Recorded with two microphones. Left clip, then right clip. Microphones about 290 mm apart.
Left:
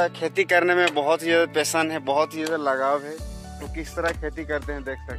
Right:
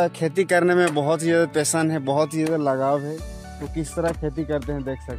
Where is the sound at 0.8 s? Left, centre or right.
Right.